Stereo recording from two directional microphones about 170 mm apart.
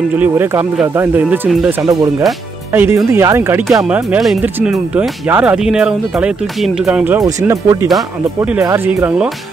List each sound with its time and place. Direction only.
0.2 s speech: 15° right (ahead or behind)
1.8 s speech: 20° right (ahead or behind)
7.2 s speech: 20° right (ahead or behind)